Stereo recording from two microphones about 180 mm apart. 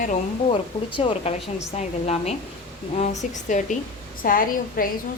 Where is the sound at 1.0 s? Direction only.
30° left (ahead or behind).